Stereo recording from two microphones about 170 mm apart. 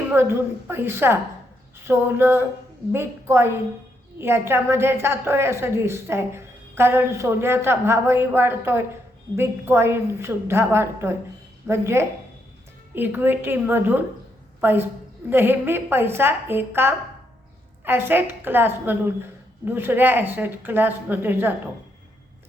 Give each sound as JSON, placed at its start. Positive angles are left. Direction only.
{"t": 0.1, "sound": "a woman's voice", "side_deg": -15}